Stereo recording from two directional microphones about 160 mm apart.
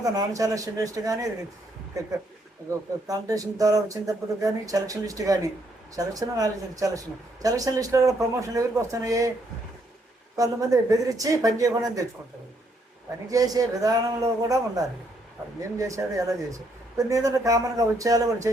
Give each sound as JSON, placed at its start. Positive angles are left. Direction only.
{"t": 0.0, "sound": "speech", "side_deg": -20}
{"t": 3.1, "sound": "speech", "side_deg": -20}
{"t": 10.3, "sound": "speech", "side_deg": -20}
{"t": 13.3, "sound": "speech", "side_deg": -20}